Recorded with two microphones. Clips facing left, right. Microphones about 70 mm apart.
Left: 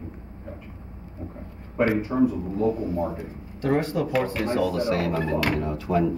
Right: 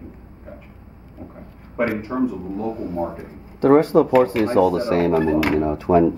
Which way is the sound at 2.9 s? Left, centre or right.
Right.